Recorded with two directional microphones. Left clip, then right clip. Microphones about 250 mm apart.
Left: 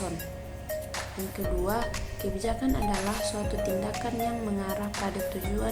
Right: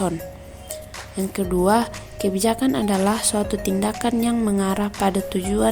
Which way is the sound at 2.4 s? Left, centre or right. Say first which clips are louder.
Right 7 dB; right.